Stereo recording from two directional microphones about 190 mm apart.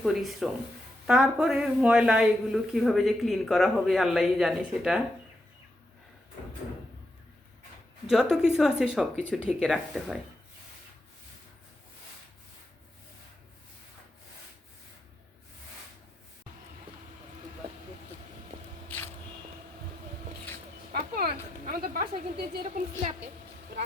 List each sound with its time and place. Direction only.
0.0 s a woman's voice: centre (ahead or behind)
8.0 s a woman's voice: 5° right (ahead or behind)
20.9 s a sound: 50° right (ahead or behind)